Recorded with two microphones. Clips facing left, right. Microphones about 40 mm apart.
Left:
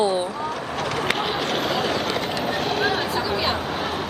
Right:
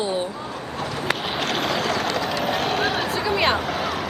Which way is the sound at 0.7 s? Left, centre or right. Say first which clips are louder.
Left 1 dB; left.